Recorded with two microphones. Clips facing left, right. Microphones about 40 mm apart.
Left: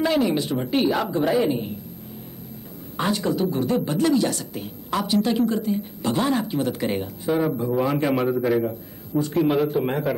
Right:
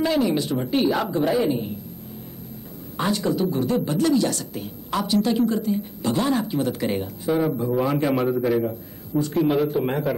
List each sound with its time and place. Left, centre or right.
0.0 s a woman's voice: centre
3.0 s a woman's voice: centre
9.8 s a man's voice: centre